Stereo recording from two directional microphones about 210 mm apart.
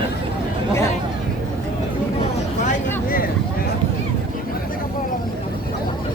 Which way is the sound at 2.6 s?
45° left (ahead or behind).